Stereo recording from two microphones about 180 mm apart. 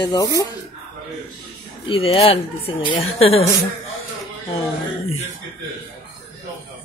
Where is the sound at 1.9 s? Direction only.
30° left (ahead or behind).